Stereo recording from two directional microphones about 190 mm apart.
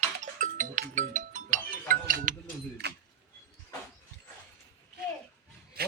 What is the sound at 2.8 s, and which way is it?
Keys jangling, 60° right (ahead or behind).